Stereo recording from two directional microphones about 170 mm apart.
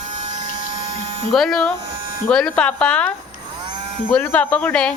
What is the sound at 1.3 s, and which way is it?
Speech, centre (ahead or behind).